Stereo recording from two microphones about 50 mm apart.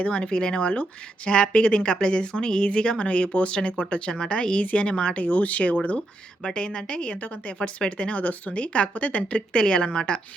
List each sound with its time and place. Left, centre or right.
0.0 s speech: left
5.2 s speech: left
6.4 s a woman's voice: centre